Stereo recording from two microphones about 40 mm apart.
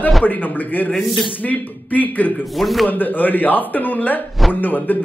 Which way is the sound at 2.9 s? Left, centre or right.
Left.